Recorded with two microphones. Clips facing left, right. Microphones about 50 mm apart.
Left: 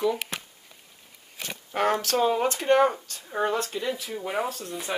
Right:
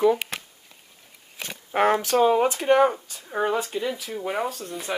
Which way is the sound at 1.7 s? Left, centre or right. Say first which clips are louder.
Right 4 dB; centre.